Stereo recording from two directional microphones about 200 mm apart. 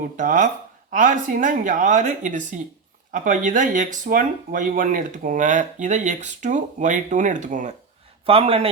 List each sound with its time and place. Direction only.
0.0 s speech: 40° right (ahead or behind)
8.3 s speech: 30° right (ahead or behind)